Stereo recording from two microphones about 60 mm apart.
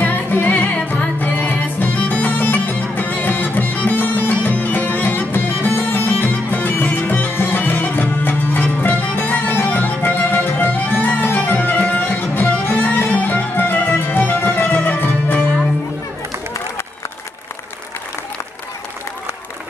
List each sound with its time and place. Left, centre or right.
0.0 s music: left